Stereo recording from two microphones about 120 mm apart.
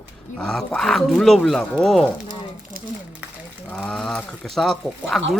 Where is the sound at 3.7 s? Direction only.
Centre (ahead or behind).